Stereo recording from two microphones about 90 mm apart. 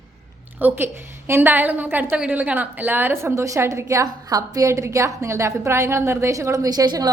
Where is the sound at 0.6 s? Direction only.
20° right (ahead or behind).